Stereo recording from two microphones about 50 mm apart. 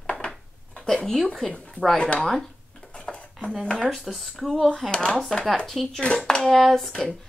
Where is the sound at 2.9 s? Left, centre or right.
Left.